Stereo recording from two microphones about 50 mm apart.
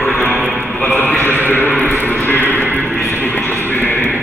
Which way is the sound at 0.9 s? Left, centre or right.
Left.